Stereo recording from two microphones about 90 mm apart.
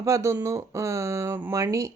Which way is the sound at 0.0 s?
30° right (ahead or behind).